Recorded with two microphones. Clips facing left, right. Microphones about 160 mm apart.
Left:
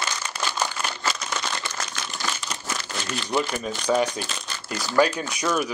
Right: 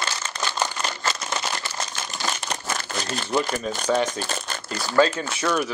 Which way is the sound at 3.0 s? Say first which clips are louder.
Even; 45° right (ahead or behind).